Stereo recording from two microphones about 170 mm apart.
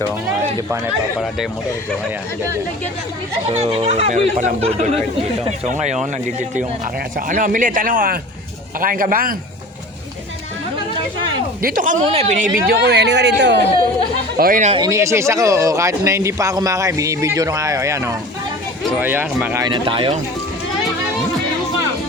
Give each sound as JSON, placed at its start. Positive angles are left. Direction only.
{"t": 3.5, "sound": "speech", "side_deg": -35}
{"t": 7.2, "sound": "speech", "side_deg": -50}
{"t": 11.6, "sound": "speech", "side_deg": -50}
{"t": 12.1, "sound": "speech", "side_deg": -40}
{"t": 12.6, "sound": "speech", "side_deg": -80}
{"t": 14.3, "sound": "speech", "side_deg": -55}
{"t": 14.8, "sound": "speech", "side_deg": -15}
{"t": 19.6, "sound": "speech", "side_deg": -30}